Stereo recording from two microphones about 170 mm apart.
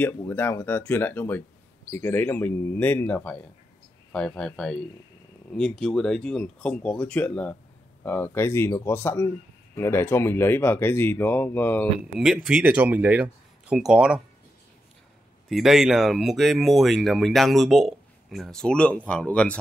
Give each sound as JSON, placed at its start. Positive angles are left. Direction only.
{"t": 0.0, "sound": "speech", "side_deg": 10}
{"t": 12.2, "sound": "speech", "side_deg": -5}
{"t": 15.4, "sound": "speech", "side_deg": 0}